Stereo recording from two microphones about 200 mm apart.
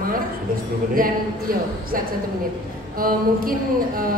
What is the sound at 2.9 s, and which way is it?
Mantra, 45° right (ahead or behind).